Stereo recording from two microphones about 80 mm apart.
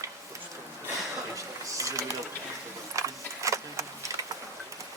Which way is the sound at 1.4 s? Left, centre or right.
Right.